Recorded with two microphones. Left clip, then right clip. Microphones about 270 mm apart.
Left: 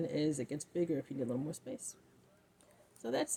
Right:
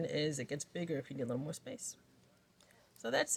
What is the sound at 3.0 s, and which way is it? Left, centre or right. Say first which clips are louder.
Speech: right 2 dB; right.